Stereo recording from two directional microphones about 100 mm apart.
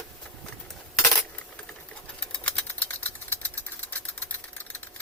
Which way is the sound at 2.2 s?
15° left (ahead or behind).